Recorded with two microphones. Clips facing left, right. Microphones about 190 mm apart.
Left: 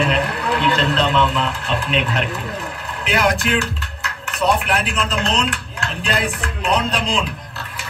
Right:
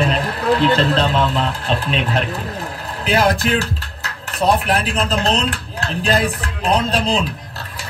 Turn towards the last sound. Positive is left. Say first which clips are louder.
# right 2 dB
turn(degrees=-35)  # may be behind; listen again after turning